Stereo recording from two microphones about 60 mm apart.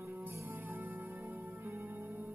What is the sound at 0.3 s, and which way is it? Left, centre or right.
Music, right.